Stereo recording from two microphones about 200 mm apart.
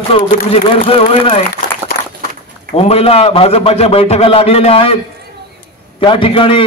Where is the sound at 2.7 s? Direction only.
30° left (ahead or behind).